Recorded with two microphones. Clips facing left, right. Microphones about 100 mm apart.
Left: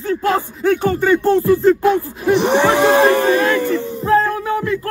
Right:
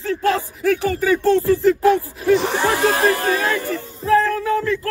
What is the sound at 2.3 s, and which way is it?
Speech, 70° left (ahead or behind).